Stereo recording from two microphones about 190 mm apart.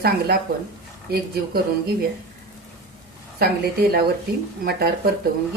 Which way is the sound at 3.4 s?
55° right (ahead or behind).